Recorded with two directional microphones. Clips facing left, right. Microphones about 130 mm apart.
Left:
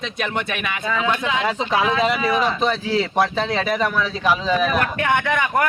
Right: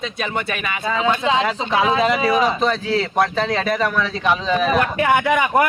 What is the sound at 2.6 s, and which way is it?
A man's voice, centre (ahead or behind).